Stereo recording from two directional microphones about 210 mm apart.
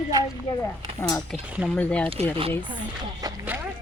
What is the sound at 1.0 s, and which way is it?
Speech, 15° left (ahead or behind).